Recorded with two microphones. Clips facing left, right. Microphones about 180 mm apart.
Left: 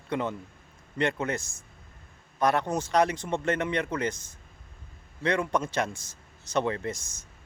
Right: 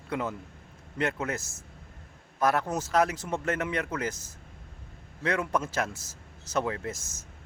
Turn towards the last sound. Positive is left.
turn(degrees=-5)  # may be behind; listen again after turning